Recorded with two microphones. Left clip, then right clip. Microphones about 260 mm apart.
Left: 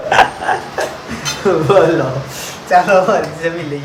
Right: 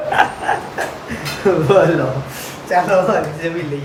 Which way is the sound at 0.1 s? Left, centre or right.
Left.